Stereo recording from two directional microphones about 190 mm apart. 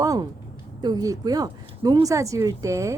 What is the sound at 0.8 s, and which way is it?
A woman's voice, 20° right (ahead or behind).